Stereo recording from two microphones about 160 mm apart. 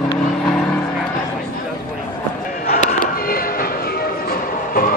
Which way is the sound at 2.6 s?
60° left (ahead or behind).